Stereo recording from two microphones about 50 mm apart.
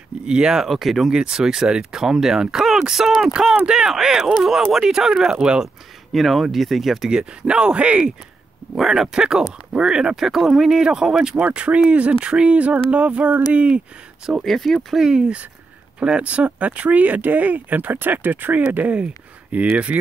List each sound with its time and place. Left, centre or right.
0.2 s speech: centre
0.7 s speech: centre
1.1 s speech: centre
3.5 s speech: centre
6.1 s speech: centre
7.1 s speech: centre
8.7 s speech: centre
10.1 s speech: centre; by 13.7 s right
14.4 s speech: centre
15.0 s speech: centre